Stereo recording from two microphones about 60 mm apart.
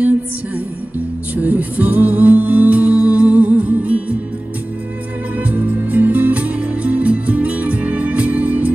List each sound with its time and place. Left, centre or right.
1.3 s music: right
5.4 s music: right